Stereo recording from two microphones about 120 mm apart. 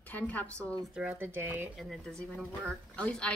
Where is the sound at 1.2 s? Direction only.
20° right (ahead or behind).